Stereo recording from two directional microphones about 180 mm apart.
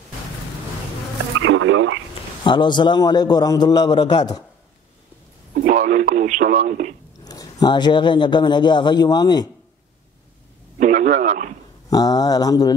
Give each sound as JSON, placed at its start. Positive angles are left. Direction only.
{"t": 1.4, "sound": "a sound", "side_deg": -90}
{"t": 2.4, "sound": "a man's voice", "side_deg": 25}
{"t": 5.5, "sound": "speech", "side_deg": -45}
{"t": 7.2, "sound": "a man's voice", "side_deg": 20}
{"t": 10.8, "sound": "speech", "side_deg": -45}
{"t": 11.9, "sound": "a man's voice", "side_deg": 20}